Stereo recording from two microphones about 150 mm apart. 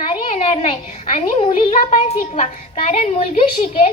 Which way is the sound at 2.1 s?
50° left (ahead or behind).